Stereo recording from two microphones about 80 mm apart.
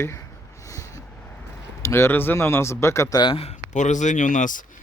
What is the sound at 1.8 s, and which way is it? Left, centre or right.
Speech, left.